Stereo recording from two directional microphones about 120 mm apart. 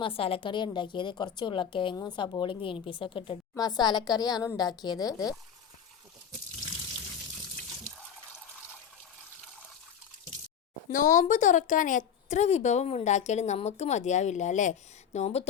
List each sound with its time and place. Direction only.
0.0 s a woman's voice: 50° left (ahead or behind)
3.6 s a woman's voice: 35° left (ahead or behind)
10.8 s speech: 90° left; by 15.4 s 65° left (ahead or behind)